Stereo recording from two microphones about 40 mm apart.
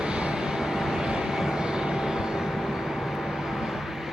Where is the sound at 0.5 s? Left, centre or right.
Centre.